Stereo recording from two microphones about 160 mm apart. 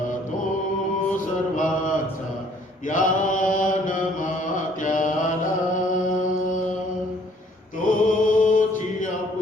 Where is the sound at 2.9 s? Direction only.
55° left (ahead or behind).